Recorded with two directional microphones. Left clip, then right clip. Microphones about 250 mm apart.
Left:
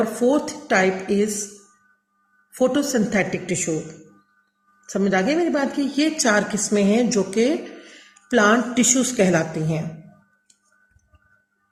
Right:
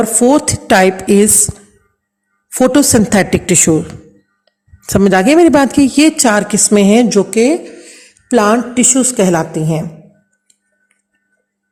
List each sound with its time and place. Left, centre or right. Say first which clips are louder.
0.2 s speech: right 12 dB; right
2.6 s speech: right 10 dB; right
4.9 s a woman's voice: right 11 dB; right